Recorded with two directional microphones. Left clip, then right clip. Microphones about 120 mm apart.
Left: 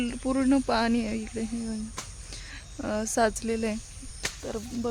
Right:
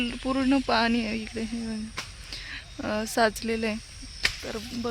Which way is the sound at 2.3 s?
20° right (ahead or behind).